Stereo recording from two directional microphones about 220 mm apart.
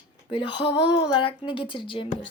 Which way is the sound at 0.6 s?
25° left (ahead or behind).